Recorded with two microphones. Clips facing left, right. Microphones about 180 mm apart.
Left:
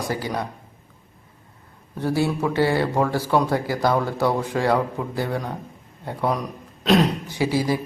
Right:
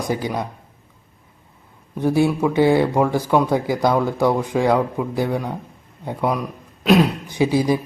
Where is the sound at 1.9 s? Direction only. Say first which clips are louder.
Right 5 dB; 15° right (ahead or behind).